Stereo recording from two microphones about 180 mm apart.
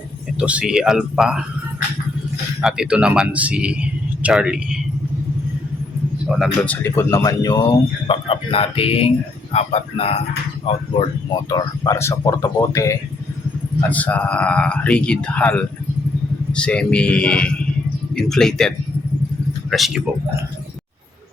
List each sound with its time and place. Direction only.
0.3 s speech: 5° right (ahead or behind)
2.6 s speech: 5° right (ahead or behind)
6.2 s speech: centre (ahead or behind)
19.7 s speech: centre (ahead or behind)